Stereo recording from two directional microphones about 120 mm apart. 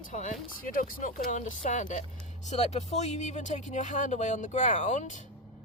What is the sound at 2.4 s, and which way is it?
Speech, 70° left (ahead or behind).